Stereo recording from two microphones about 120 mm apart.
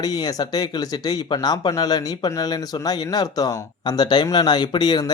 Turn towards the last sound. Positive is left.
turn(degrees=35)  # may be behind; listen again after turning